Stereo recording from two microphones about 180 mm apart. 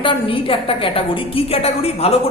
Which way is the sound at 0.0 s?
30° left (ahead or behind).